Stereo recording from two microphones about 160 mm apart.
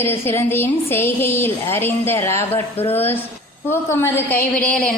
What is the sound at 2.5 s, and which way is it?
Speech, 40° left (ahead or behind).